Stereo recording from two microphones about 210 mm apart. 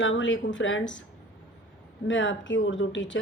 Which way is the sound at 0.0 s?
65° left (ahead or behind).